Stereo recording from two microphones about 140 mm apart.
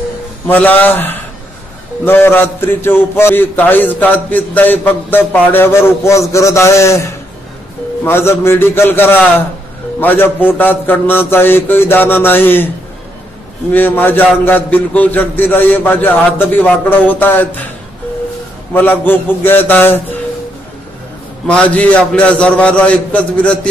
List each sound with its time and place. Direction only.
0.5 s a man's voice: 15° left (ahead or behind)
8.0 s a man's voice: 15° left (ahead or behind)
13.7 s a man's voice: 15° left (ahead or behind)
18.7 s a man's voice: 15° left (ahead or behind)
21.5 s a man's voice: 10° left (ahead or behind)